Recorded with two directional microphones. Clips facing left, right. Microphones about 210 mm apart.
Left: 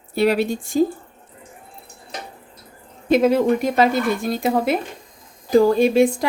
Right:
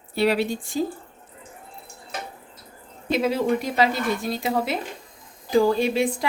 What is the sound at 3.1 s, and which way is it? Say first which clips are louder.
Speech: left 6 dB; 55° left (ahead or behind).